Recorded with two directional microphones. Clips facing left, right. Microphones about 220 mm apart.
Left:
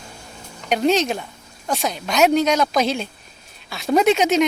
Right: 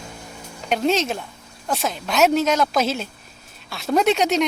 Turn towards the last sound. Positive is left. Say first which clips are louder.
# left 2 dB
turn(degrees=0)  # may be behind; listen again after turning